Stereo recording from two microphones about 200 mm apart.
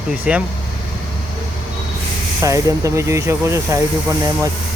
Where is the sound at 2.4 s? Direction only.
15° right (ahead or behind).